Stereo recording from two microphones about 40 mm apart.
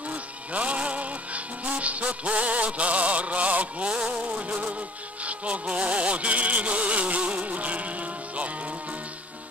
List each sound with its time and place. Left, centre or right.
0.1 s music: right